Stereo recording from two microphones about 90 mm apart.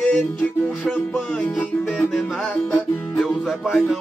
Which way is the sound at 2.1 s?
Centre (ahead or behind).